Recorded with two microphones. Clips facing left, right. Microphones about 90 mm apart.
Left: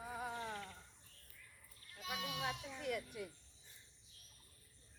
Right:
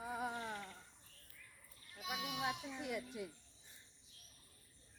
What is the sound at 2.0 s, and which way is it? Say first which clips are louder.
Goat: right 1 dB; 10° right (ahead or behind).